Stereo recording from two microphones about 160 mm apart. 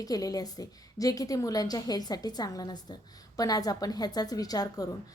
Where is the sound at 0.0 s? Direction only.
20° left (ahead or behind).